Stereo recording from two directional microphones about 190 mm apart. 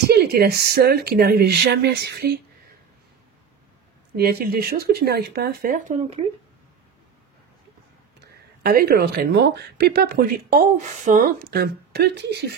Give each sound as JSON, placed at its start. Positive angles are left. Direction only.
{"t": 0.1, "sound": "speech", "side_deg": -55}
{"t": 4.2, "sound": "speech", "side_deg": -55}
{"t": 8.6, "sound": "speech", "side_deg": -55}